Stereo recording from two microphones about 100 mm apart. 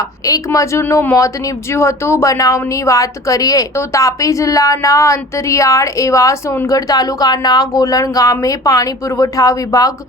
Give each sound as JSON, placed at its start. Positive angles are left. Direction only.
{"t": 0.3, "sound": "a woman's voice", "side_deg": 35}